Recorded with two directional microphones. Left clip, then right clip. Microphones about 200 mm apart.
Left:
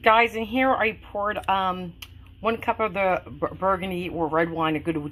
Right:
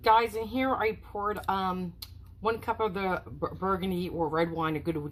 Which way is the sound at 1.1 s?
40° left (ahead or behind).